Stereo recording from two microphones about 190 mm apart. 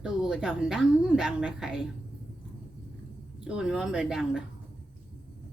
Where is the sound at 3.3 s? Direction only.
5° right (ahead or behind).